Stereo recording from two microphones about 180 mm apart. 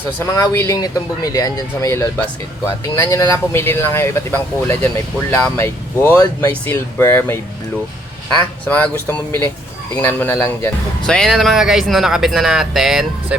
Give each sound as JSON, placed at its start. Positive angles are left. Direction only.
{"t": 0.0, "sound": "speech", "side_deg": 15}
{"t": 8.6, "sound": "speech", "side_deg": 10}
{"t": 11.0, "sound": "speech", "side_deg": 0}